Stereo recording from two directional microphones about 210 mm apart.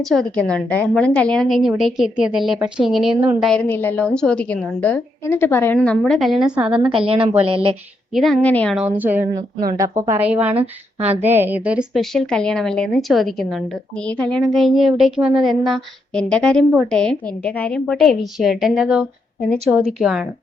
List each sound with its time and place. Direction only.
0.0 s a woman's voice: centre (ahead or behind)
3.5 s a woman's voice: 10° left (ahead or behind)
7.1 s a woman's voice: 25° right (ahead or behind)
8.1 s a woman's voice: centre (ahead or behind)
10.6 s a woman's voice: 30° right (ahead or behind)
11.2 s a woman's voice: 10° right (ahead or behind)